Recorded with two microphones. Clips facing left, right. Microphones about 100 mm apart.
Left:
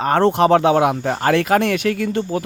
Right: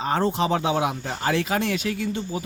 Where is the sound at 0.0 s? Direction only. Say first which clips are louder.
Left 8 dB; 65° left (ahead or behind).